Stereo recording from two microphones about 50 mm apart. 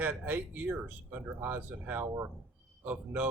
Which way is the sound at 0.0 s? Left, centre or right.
Right.